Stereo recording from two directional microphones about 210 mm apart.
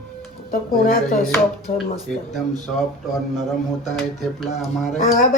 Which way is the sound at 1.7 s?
Centre (ahead or behind).